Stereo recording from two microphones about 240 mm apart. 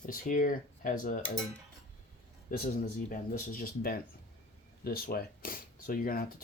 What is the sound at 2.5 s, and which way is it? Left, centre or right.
Speech, left.